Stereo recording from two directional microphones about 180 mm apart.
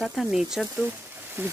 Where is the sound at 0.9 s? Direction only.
10° right (ahead or behind).